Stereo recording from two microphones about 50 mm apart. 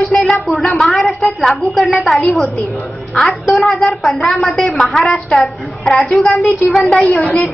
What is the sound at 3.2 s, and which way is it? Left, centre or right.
A woman's voice, centre.